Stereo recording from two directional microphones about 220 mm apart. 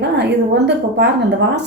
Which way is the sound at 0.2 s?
50° right (ahead or behind).